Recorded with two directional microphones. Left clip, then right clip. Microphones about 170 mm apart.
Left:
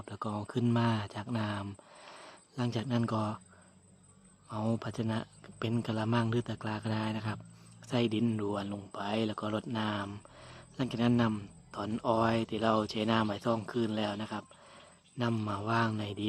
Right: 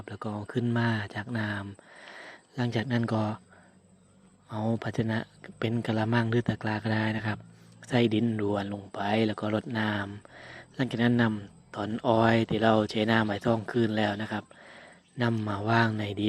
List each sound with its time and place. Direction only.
0.0 s speech: 5° right (ahead or behind)
1.9 s a sound: 10° right (ahead or behind)
3.0 s speech: 10° right (ahead or behind)
4.4 s speech: 10° right (ahead or behind)
10.3 s a sound: 15° right (ahead or behind)
11.9 s speech: 15° right (ahead or behind)